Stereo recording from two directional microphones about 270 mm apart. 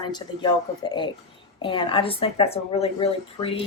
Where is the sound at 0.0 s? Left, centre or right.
Centre.